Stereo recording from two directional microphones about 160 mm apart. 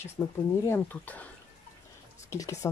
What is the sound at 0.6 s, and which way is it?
Speech, 15° left (ahead or behind).